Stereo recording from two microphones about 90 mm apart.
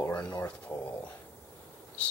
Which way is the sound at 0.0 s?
15° left (ahead or behind).